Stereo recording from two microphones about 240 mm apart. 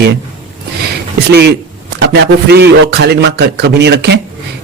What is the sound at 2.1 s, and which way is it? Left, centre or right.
A man's voice, right.